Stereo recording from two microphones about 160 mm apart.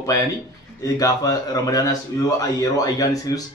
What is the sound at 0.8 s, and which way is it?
A man's voice, 20° left (ahead or behind).